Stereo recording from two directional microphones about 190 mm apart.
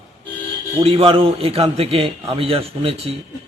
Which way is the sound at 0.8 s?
30° right (ahead or behind).